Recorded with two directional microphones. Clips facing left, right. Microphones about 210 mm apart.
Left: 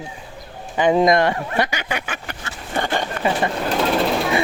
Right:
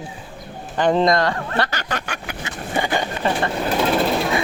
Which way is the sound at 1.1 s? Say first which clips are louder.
Left 2 dB; 20° left (ahead or behind).